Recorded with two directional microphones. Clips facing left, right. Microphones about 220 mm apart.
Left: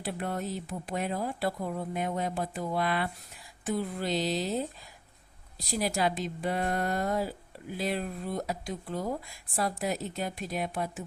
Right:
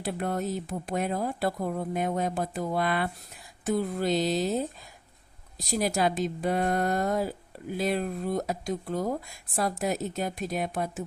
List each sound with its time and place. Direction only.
0.0 s speech: 40° right (ahead or behind)
5.5 s speech: 45° right (ahead or behind)